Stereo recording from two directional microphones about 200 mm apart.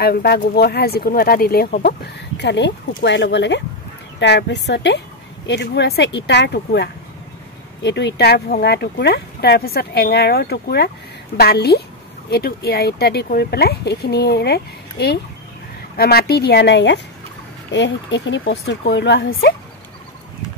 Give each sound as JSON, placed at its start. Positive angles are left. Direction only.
{"t": 0.0, "sound": "speech", "side_deg": 50}